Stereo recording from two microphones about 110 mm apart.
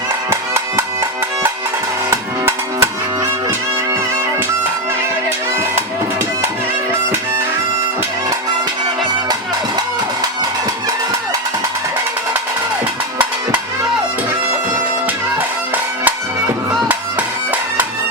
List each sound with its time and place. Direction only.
0.3 s music: 20° right (ahead or behind)
2.0 s music: 20° right (ahead or behind)
16.9 s music: 15° right (ahead or behind)